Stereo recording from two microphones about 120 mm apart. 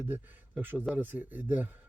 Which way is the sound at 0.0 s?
15° right (ahead or behind).